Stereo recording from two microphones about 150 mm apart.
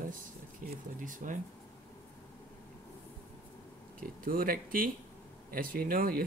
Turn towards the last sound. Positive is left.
turn(degrees=-75)  # may be behind; listen again after turning